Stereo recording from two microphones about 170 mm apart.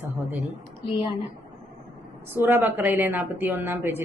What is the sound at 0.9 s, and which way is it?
Speech, 30° left (ahead or behind).